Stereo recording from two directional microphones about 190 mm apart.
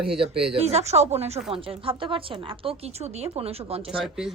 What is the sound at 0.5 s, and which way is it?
A woman's voice, 35° right (ahead or behind).